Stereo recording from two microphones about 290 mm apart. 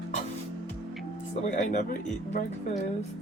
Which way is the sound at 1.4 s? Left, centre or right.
Left.